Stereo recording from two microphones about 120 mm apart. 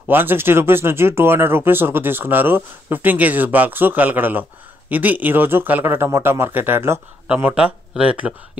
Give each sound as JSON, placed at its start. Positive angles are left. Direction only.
{"t": 0.1, "sound": "speech", "side_deg": -15}